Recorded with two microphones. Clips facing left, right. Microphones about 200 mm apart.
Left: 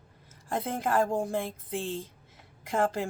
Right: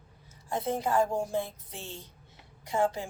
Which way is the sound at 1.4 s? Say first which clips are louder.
Left 2 dB; 90° left.